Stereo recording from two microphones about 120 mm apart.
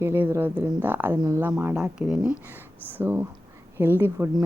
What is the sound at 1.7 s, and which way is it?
A woman's voice, 5° right (ahead or behind).